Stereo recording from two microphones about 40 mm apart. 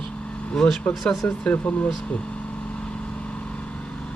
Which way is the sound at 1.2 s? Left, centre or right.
Left.